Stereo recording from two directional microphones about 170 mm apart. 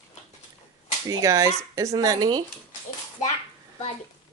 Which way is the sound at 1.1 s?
20° right (ahead or behind).